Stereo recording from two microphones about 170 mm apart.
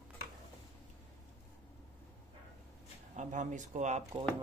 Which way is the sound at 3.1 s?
45° right (ahead or behind).